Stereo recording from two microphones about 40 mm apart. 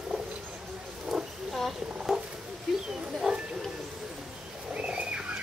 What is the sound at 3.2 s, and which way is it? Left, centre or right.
Bow-wow, centre.